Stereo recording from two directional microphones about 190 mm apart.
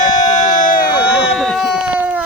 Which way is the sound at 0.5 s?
45° left (ahead or behind).